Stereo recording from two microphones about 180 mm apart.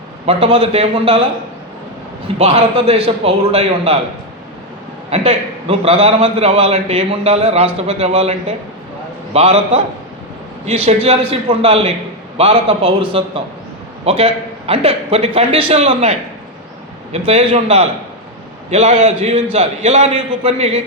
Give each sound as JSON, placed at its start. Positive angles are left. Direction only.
{"t": 0.3, "sound": "a man's voice", "side_deg": -30}
{"t": 2.2, "sound": "a man's voice", "side_deg": -35}
{"t": 5.1, "sound": "a man's voice", "side_deg": -35}